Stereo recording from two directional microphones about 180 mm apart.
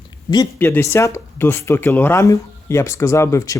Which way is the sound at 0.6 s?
10° left (ahead or behind).